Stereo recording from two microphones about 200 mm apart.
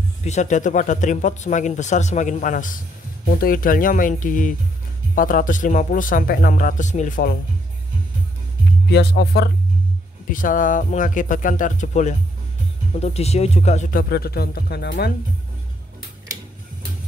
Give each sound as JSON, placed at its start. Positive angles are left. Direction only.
{"t": 0.2, "sound": "speech", "side_deg": 35}
{"t": 8.9, "sound": "speech", "side_deg": 55}
{"t": 10.3, "sound": "speech", "side_deg": 40}
{"t": 14.0, "sound": "speech", "side_deg": 50}